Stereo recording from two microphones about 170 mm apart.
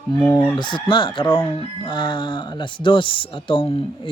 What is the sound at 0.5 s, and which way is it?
Speech, 25° left (ahead or behind).